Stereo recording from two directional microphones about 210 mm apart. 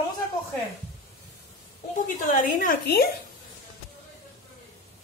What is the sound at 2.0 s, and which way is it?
A woman's voice, 40° left (ahead or behind).